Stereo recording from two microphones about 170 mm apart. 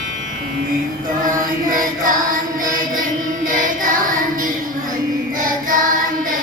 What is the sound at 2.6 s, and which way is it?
Music, 55° right (ahead or behind).